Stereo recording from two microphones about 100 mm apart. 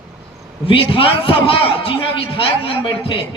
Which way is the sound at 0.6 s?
65° left (ahead or behind).